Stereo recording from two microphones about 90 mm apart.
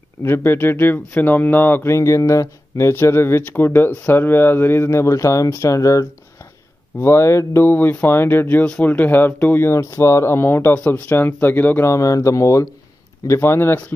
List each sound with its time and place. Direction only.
0.2 s speech: 25° left (ahead or behind)
11.9 s speech: 35° left (ahead or behind)